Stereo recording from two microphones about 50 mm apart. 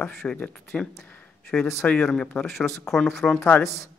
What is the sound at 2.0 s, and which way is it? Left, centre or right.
Speech, centre.